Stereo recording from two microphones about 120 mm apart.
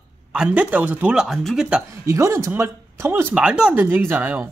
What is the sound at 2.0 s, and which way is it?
Speech, 25° right (ahead or behind).